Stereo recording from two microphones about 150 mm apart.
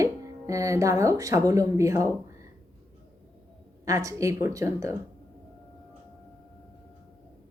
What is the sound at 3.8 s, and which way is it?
Speech, 20° right (ahead or behind).